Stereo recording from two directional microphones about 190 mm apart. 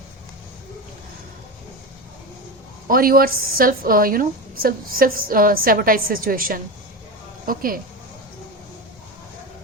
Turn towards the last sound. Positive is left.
turn(degrees=-50)  # may be behind; listen again after turning